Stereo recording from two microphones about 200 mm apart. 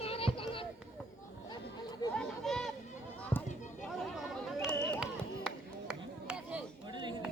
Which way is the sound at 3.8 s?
Centre (ahead or behind).